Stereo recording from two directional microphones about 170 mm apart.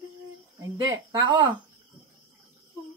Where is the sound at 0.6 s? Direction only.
20° right (ahead or behind).